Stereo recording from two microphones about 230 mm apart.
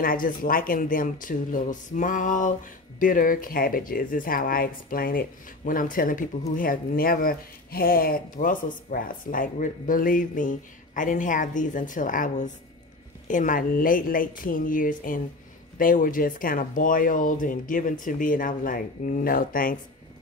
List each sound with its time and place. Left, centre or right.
0.0 s speech: left